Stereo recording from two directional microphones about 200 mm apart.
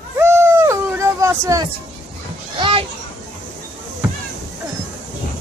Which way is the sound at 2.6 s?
25° right (ahead or behind).